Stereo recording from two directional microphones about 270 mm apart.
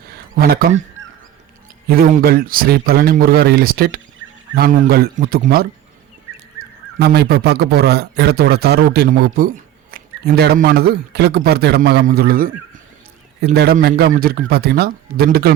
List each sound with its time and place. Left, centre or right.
0.3 s a man's voice: right
1.9 s a man's voice: right
7.0 s a man's voice: right